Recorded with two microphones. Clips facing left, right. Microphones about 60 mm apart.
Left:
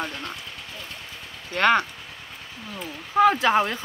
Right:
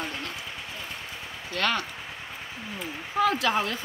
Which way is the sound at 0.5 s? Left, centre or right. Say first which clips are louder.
Right 1 dB; centre.